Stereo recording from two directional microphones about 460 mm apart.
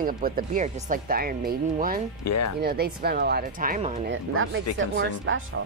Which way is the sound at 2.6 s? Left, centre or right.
Centre.